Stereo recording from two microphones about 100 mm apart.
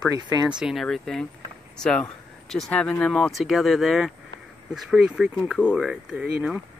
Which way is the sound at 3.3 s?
Centre (ahead or behind).